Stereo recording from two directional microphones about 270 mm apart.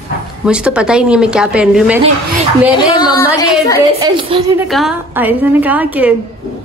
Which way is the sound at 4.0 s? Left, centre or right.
Centre.